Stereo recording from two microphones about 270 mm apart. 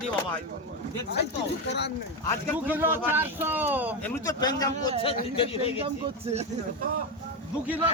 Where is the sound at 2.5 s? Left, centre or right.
Centre.